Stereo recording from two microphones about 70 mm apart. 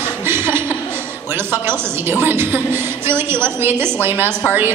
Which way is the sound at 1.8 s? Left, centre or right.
Right.